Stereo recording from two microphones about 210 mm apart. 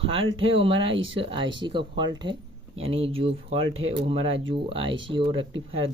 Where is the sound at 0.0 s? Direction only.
25° right (ahead or behind).